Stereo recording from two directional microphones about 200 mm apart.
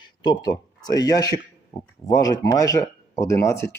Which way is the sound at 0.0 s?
20° left (ahead or behind).